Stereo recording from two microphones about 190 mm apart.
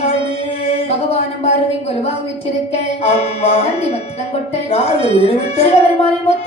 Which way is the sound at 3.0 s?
35° left (ahead or behind).